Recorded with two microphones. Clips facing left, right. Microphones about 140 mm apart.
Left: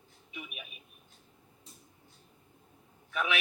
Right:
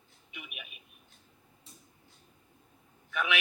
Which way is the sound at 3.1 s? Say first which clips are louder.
Even; centre (ahead or behind).